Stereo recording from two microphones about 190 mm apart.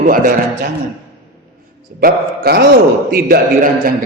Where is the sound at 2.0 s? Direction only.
55° right (ahead or behind).